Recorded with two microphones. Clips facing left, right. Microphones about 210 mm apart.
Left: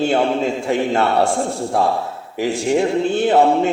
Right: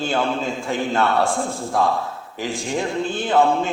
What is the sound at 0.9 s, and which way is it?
Speech, 30° left (ahead or behind).